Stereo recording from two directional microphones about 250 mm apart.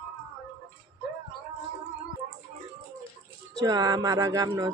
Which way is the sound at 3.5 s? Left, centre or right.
Centre.